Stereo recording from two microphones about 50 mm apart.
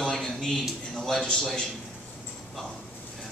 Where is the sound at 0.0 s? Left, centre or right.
Centre.